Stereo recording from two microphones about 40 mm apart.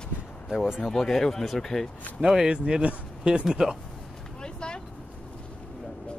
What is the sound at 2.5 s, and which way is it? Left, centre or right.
Speech, right.